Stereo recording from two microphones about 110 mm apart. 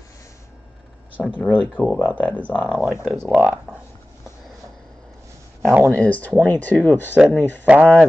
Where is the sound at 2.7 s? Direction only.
15° right (ahead or behind).